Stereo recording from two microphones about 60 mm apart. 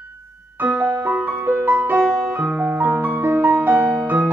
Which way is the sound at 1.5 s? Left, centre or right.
Right.